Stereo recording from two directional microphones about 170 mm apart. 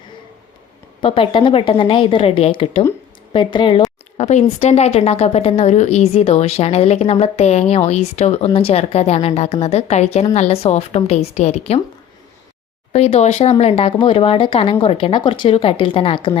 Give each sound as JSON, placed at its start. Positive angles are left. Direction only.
{"t": 1.0, "sound": "a woman's voice", "side_deg": 30}
{"t": 4.2, "sound": "a woman's voice", "side_deg": 40}
{"t": 12.9, "sound": "a woman's voice", "side_deg": 40}